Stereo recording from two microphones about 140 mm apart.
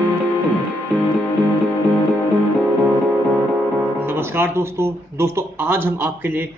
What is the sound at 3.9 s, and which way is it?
A man's voice, 15° right (ahead or behind).